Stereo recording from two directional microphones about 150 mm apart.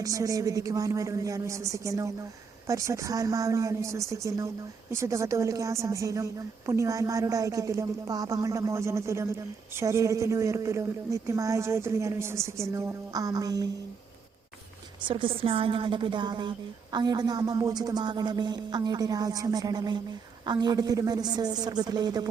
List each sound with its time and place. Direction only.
0.0 s a woman's voice: 25° right (ahead or behind)
15.0 s a woman's voice: 35° right (ahead or behind)